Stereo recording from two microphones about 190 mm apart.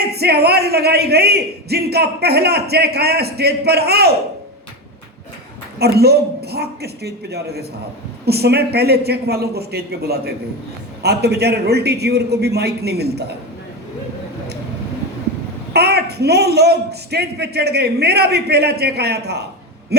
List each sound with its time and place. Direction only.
0.0 s a man's voice: 60° right (ahead or behind)
5.8 s a man's voice: 55° right (ahead or behind)
15.7 s a man's voice: 60° right (ahead or behind)